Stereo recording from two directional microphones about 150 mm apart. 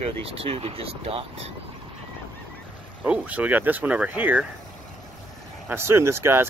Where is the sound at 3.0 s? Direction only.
10° right (ahead or behind).